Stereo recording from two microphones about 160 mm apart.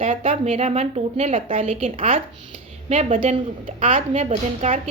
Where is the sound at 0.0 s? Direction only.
35° right (ahead or behind).